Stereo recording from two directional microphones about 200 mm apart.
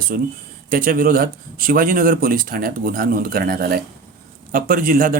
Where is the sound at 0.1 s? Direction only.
45° right (ahead or behind).